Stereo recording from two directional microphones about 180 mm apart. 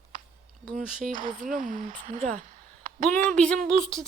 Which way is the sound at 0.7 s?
50° right (ahead or behind).